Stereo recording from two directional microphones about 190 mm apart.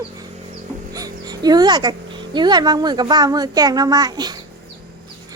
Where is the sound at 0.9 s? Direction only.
20° right (ahead or behind).